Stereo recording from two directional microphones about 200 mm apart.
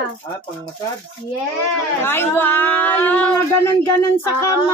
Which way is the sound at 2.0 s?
10° left (ahead or behind).